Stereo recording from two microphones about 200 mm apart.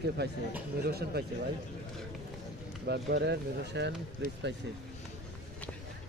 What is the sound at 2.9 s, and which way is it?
Speech, 55° right (ahead or behind).